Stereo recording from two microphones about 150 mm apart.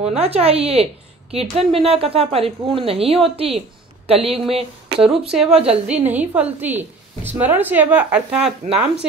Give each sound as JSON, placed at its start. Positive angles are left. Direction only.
{"t": 0.0, "sound": "a woman's voice", "side_deg": -45}
{"t": 5.0, "sound": "speech", "side_deg": -5}
{"t": 5.5, "sound": "a woman's voice", "side_deg": -45}
{"t": 5.9, "sound": "a woman's voice", "side_deg": -10}